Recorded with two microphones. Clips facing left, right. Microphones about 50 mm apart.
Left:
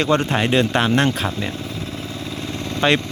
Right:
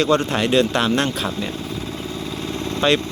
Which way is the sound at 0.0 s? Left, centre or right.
Left.